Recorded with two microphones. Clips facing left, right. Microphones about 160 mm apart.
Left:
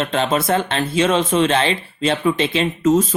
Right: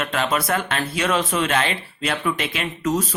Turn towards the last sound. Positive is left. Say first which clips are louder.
# left 7 dB
turn(degrees=25)  # may be behind; listen again after turning